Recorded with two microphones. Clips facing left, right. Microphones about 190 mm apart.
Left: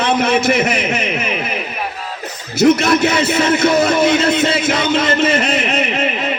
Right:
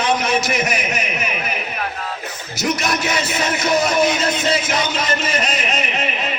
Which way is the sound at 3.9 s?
25° left (ahead or behind).